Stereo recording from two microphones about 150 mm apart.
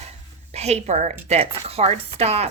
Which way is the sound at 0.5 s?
45° right (ahead or behind).